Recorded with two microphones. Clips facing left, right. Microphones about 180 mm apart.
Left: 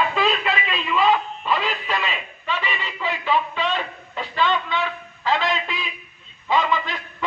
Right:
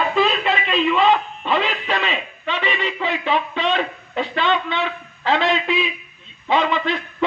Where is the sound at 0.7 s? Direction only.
25° right (ahead or behind).